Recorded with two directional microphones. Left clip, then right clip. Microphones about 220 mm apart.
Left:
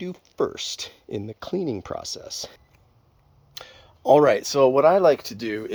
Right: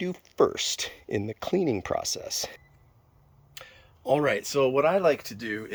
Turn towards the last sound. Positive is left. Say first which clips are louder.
# left 4 dB
turn(degrees=40)  # may be behind; listen again after turning